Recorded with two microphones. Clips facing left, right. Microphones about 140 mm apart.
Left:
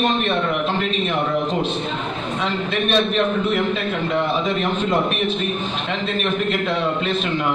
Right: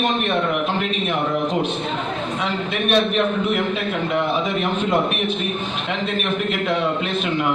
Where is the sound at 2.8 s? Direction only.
10° right (ahead or behind).